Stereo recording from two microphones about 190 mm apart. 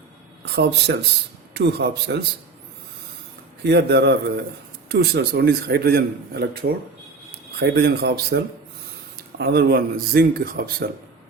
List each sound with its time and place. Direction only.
0.4 s a man's voice: 60° right (ahead or behind)
3.6 s a man's voice: 60° right (ahead or behind)